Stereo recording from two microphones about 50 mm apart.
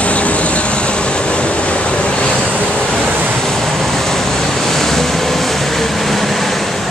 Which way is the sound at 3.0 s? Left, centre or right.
Right.